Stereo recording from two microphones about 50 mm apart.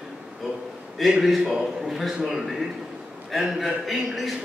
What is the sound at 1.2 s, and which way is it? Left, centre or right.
A man's voice, centre.